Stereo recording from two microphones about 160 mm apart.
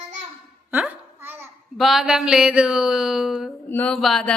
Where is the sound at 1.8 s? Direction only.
Centre (ahead or behind).